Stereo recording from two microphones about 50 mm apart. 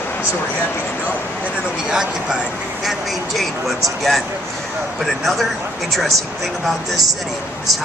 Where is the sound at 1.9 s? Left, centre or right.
Centre.